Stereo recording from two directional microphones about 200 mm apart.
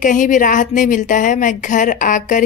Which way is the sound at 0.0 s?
40° left (ahead or behind).